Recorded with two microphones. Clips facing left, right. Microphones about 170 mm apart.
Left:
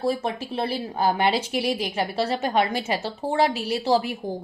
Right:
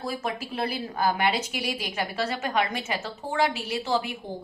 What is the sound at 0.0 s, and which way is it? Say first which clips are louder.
A woman's voice: left 6 dB; 30° left (ahead or behind).